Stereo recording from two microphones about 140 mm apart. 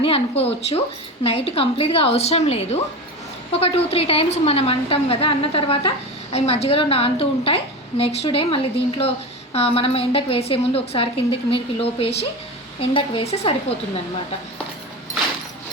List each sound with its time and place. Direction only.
0.0 s a woman's voice: 45° left (ahead or behind)